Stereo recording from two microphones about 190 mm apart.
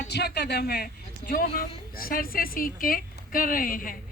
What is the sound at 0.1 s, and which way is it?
A woman's voice, 60° left (ahead or behind).